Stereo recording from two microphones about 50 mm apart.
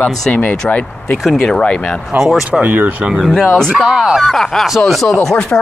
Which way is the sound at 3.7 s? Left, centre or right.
Centre.